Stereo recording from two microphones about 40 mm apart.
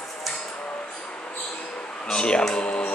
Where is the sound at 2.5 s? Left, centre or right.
Left.